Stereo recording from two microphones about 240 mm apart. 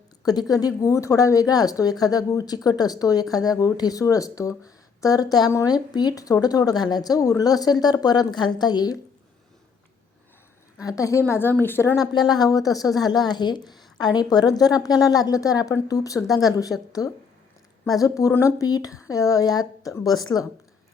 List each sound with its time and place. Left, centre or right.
0.3 s speech: centre
10.8 s speech: centre